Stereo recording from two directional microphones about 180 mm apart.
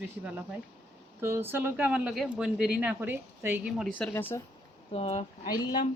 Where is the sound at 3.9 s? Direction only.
10° left (ahead or behind).